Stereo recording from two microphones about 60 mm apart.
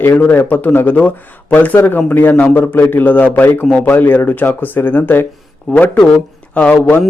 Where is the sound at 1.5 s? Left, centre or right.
Left.